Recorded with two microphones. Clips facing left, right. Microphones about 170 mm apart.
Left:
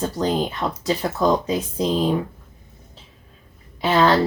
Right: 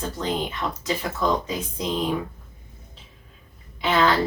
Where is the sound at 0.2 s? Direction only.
40° left (ahead or behind).